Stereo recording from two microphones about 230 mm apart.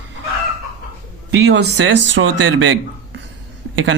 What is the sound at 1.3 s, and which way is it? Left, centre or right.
A man's voice, right.